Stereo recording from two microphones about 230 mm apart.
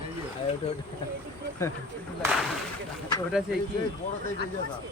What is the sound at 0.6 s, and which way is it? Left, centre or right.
Speech, left.